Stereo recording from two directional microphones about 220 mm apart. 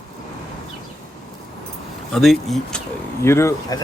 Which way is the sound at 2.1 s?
Centre (ahead or behind).